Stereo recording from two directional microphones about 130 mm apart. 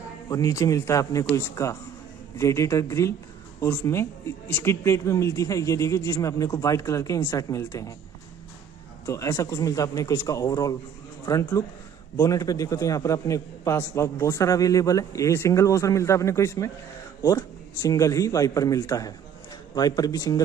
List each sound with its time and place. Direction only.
0.3 s a man's voice: 25° left (ahead or behind)
9.0 s a man's voice: 25° left (ahead or behind)